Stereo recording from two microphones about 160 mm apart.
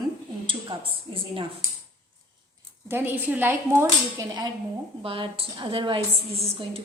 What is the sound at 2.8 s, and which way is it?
Speech, 15° right (ahead or behind).